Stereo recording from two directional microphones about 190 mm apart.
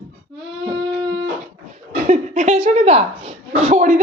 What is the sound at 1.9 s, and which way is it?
A woman's voice, 35° right (ahead or behind).